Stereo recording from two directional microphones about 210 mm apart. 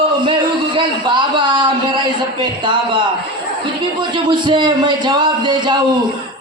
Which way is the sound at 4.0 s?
20° right (ahead or behind).